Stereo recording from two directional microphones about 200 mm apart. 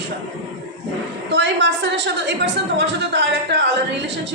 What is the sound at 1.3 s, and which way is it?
A woman's voice, 60° right (ahead or behind).